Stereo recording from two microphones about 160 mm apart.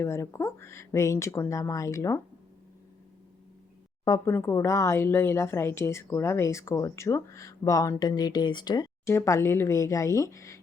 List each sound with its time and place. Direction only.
0.0 s speech: 15° left (ahead or behind)
4.0 s a woman's voice: 20° left (ahead or behind)